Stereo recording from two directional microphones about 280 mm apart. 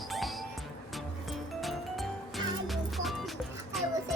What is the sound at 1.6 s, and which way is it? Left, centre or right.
Music, centre.